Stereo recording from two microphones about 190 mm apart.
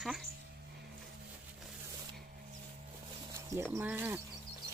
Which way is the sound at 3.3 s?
15° right (ahead or behind).